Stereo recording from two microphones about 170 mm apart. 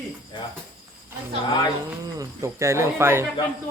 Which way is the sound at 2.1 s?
15° right (ahead or behind).